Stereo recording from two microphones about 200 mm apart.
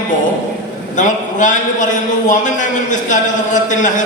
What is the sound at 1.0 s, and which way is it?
Speech, 40° left (ahead or behind).